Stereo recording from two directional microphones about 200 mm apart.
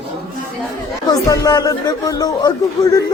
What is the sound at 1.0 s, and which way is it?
Speech, 15° left (ahead or behind).